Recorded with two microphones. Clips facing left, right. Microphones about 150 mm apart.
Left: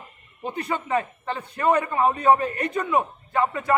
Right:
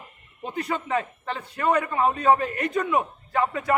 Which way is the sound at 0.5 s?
30° left (ahead or behind).